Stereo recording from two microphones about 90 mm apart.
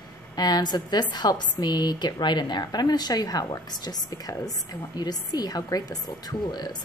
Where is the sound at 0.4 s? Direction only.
50° left (ahead or behind).